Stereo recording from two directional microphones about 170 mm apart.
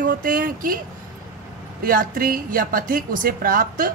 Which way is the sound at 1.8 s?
55° right (ahead or behind).